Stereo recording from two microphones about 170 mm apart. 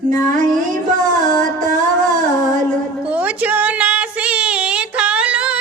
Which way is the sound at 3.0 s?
5° right (ahead or behind).